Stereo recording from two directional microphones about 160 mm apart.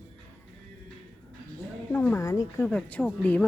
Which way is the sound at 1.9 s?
10° left (ahead or behind).